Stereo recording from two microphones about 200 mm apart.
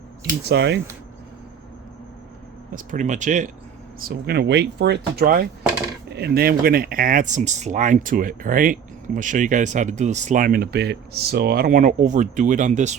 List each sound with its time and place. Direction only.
0.4 s speech: 55° right (ahead or behind)
2.7 s speech: 40° right (ahead or behind)
4.0 s speech: 50° right (ahead or behind)